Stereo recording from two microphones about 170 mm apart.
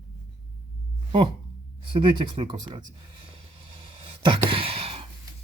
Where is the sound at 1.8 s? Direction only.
30° right (ahead or behind).